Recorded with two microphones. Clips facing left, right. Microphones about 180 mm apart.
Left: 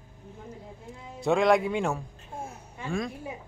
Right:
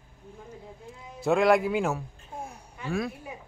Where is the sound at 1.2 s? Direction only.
Centre (ahead or behind).